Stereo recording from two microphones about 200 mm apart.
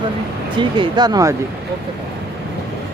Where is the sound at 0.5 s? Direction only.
25° right (ahead or behind).